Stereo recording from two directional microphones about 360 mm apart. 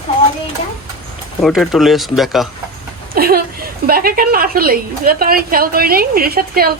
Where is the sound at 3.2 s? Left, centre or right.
Right.